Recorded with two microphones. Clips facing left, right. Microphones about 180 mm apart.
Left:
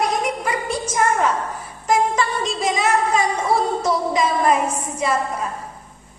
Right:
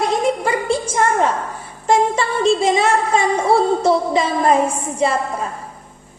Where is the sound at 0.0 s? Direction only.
30° right (ahead or behind).